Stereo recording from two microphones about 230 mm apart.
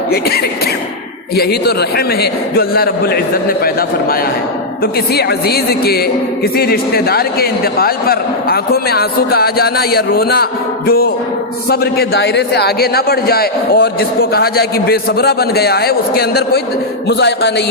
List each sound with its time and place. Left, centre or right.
1.4 s a man's voice: left